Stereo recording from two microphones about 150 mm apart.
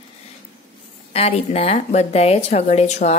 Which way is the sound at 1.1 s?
45° left (ahead or behind).